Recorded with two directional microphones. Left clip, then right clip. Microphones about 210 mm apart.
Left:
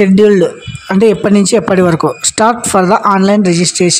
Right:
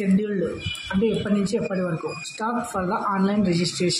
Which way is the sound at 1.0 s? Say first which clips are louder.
Left 15 dB; 55° left (ahead or behind).